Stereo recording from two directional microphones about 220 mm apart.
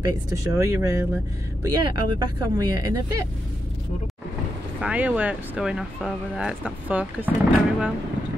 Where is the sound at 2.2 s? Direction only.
20° right (ahead or behind).